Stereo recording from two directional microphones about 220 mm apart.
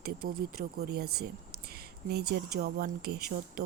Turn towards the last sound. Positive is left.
turn(degrees=-45)  # may be behind; listen again after turning